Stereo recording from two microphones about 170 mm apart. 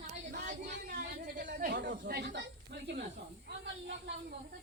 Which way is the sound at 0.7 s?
80° right.